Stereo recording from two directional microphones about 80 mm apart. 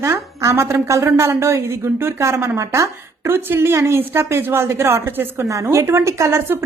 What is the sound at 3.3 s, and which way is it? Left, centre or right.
A woman's voice, right.